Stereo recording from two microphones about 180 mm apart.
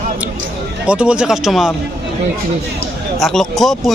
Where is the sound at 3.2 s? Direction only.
Centre (ahead or behind).